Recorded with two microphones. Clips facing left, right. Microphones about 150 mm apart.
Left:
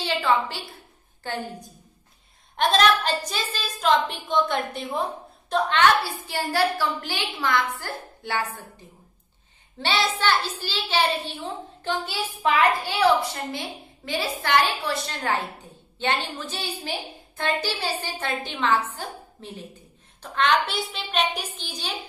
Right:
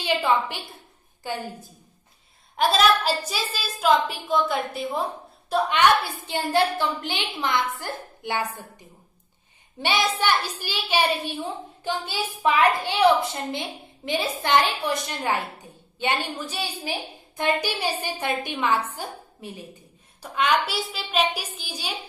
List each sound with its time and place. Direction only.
0.0 s a sound: 15° right (ahead or behind)
1.2 s a woman's voice: 10° right (ahead or behind)
5.7 s a woman's voice: 15° right (ahead or behind)